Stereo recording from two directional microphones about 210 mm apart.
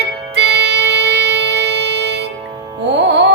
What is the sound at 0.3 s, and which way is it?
Music, 55° right (ahead or behind).